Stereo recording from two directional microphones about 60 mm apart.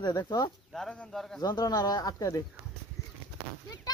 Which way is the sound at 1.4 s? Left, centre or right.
Left.